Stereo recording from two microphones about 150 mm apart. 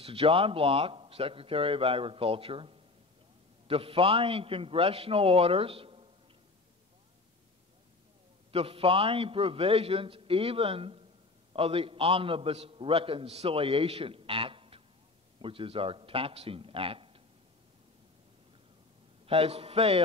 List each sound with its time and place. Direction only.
0.0 s a man's voice: 40° right (ahead or behind)
8.5 s a man's voice: 40° right (ahead or behind)
19.2 s a man's voice: 40° right (ahead or behind)